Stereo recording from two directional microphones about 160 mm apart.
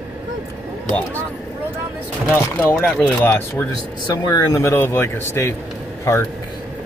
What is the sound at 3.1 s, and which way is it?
Speech, 15° left (ahead or behind).